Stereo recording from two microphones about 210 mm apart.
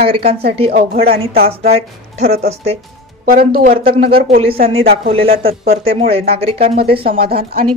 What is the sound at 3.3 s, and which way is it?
Speech, 45° right (ahead or behind).